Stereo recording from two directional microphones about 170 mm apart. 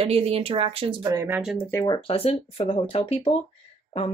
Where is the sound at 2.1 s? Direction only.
35° left (ahead or behind).